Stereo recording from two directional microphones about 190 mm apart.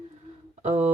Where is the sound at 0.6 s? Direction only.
35° right (ahead or behind).